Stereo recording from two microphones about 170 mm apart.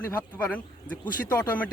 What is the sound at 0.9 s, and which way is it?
Speech, 10° left (ahead or behind).